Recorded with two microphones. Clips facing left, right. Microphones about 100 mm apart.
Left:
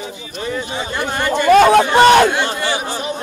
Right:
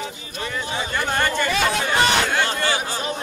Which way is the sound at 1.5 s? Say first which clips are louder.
Left 13 dB; 50° left (ahead or behind).